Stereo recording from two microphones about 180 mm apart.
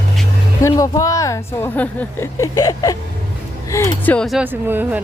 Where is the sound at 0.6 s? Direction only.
20° left (ahead or behind).